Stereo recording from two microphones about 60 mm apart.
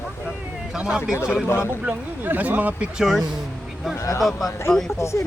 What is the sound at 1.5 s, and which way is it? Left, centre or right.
Speech, left.